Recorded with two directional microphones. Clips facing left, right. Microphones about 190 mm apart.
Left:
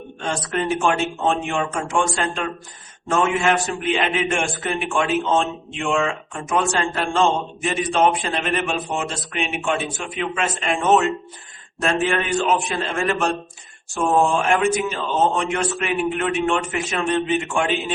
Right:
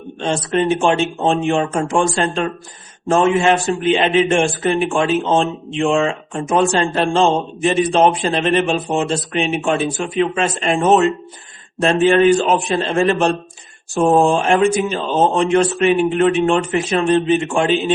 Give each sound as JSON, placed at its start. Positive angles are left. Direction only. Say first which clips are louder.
{"t": 0.2, "sound": "a man's voice", "louder": "right 6 dB", "side_deg": -25}